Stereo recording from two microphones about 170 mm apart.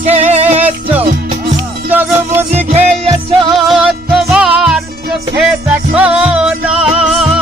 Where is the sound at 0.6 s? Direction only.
10° right (ahead or behind).